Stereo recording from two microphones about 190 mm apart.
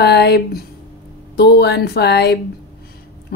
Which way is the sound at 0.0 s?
60° left (ahead or behind).